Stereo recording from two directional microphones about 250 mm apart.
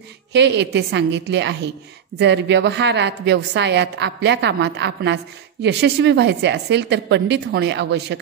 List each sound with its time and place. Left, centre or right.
0.3 s a woman's voice: right